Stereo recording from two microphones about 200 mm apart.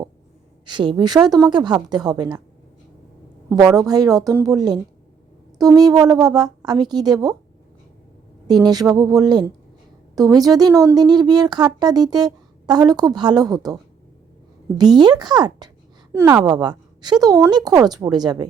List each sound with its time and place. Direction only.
0.6 s speech: 25° right (ahead or behind)
3.8 s speech: 20° right (ahead or behind)
8.4 s speech: 20° right (ahead or behind)
14.8 s speech: 20° right (ahead or behind)